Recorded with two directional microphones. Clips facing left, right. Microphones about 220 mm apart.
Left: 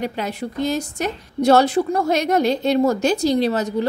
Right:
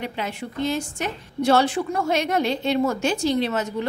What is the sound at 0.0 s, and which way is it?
A woman's voice, 40° left (ahead or behind).